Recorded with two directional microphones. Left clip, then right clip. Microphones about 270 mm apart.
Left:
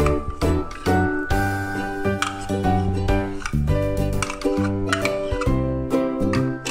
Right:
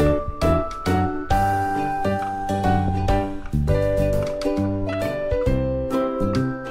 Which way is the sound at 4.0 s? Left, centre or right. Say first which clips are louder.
Right 3 dB; centre.